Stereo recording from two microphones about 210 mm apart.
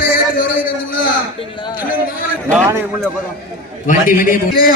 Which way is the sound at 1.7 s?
45° left (ahead or behind).